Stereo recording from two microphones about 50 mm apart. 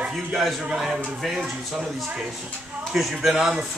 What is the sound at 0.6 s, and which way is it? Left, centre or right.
Speech, centre.